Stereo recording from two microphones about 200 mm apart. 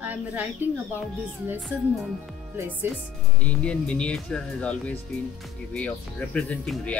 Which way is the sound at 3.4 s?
5° left (ahead or behind).